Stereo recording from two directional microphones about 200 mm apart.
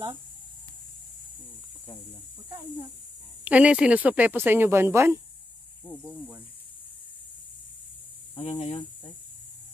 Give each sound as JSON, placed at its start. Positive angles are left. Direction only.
{"t": 3.4, "sound": "speech", "side_deg": -5}
{"t": 8.5, "sound": "speech", "side_deg": 30}